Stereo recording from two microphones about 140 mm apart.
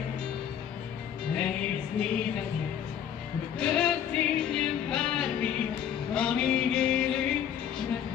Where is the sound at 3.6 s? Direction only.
5° left (ahead or behind).